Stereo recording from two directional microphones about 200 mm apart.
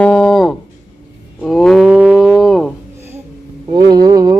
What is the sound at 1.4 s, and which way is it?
Cattle, centre (ahead or behind).